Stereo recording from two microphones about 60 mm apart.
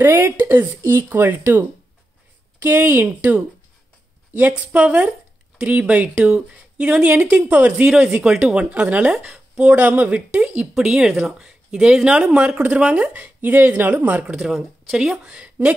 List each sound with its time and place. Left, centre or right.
0.0 s speech: right
2.6 s speech: right
7.9 s speech: centre
9.2 s a sound: centre
9.7 s speech: right
14.3 s speech: centre